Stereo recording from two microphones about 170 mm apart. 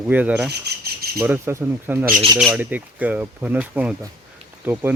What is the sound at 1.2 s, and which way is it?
Speech, 15° right (ahead or behind).